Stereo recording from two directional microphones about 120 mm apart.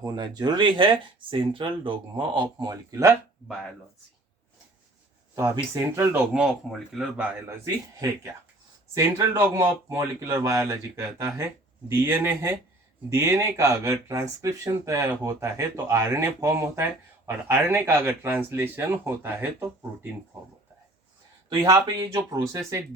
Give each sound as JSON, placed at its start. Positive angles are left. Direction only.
{"t": 0.0, "sound": "speech", "side_deg": -35}
{"t": 5.3, "sound": "speech", "side_deg": -20}
{"t": 6.3, "sound": "speech", "side_deg": -5}
{"t": 9.0, "sound": "speech", "side_deg": -30}
{"t": 10.2, "sound": "speech", "side_deg": -25}
{"t": 21.6, "sound": "speech", "side_deg": -30}